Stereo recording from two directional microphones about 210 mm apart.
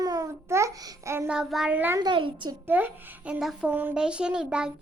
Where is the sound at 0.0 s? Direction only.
15° right (ahead or behind).